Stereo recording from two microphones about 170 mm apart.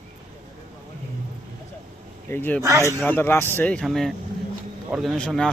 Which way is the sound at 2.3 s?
10° left (ahead or behind).